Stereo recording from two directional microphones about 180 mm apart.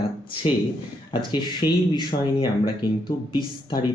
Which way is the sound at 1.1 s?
25° left (ahead or behind).